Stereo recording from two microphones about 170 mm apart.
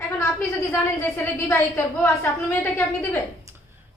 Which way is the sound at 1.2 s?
15° left (ahead or behind).